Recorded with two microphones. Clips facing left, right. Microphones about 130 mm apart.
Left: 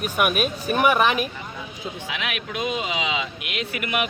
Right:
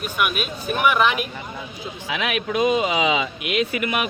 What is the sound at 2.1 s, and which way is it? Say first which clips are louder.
Speech: right 9 dB; 45° right (ahead or behind).